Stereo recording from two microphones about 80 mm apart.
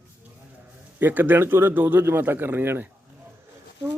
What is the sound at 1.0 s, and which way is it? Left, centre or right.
Speech, right.